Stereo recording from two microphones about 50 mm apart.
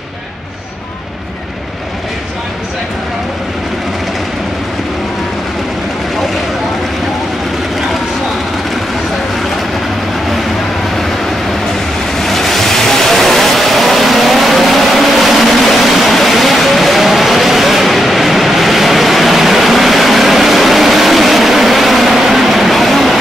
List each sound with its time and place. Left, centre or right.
12.2 s vehicle: centre